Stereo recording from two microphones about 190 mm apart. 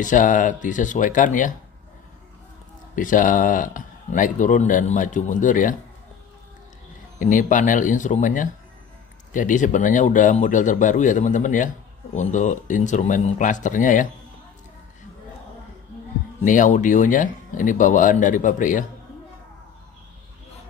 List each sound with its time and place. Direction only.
0.0 s speech: 45° left (ahead or behind)
3.0 s speech: 45° left (ahead or behind)
7.2 s speech: 40° left (ahead or behind)
16.4 s speech: 40° left (ahead or behind)